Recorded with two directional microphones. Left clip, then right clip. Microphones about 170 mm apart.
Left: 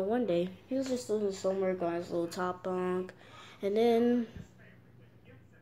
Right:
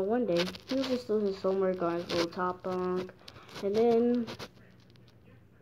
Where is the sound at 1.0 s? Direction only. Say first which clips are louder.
Right 2 dB; 10° right (ahead or behind).